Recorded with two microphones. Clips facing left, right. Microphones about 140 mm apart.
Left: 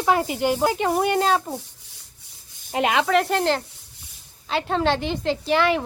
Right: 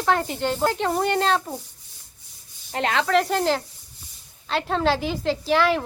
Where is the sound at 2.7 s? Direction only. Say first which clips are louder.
Left 3 dB; 15° left (ahead or behind).